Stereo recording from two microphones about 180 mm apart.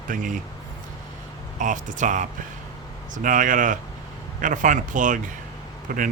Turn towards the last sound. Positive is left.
turn(degrees=-50)  # may be behind; listen again after turning